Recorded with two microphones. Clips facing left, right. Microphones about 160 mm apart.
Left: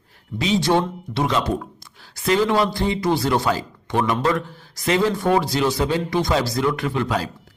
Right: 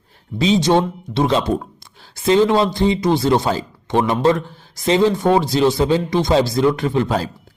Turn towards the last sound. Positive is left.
turn(degrees=-30)  # may be behind; listen again after turning